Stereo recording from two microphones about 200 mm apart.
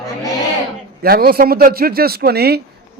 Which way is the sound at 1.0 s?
50° right (ahead or behind).